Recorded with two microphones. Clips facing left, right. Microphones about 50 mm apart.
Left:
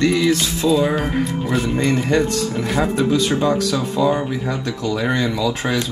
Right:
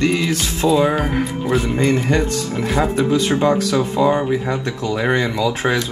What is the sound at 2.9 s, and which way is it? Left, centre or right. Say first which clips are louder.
Music: right 1 dB; right.